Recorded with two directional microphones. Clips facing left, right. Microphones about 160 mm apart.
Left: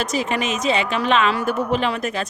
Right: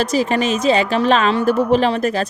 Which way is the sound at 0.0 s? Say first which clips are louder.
Right 5 dB; 35° right (ahead or behind).